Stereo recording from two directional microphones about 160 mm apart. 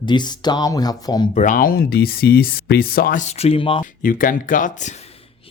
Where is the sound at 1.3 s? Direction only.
55° left (ahead or behind); by 3.8 s 35° left (ahead or behind).